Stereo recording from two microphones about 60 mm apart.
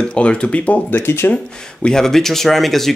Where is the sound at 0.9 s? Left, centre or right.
Left.